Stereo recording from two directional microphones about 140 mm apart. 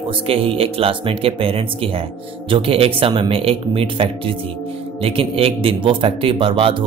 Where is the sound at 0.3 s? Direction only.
40° right (ahead or behind).